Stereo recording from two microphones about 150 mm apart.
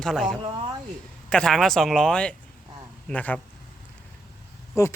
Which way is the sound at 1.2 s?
5° left (ahead or behind).